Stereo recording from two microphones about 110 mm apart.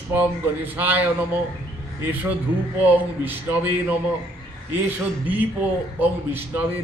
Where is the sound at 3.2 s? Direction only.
15° right (ahead or behind).